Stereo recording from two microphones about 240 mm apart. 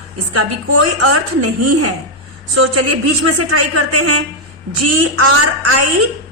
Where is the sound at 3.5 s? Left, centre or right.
Right.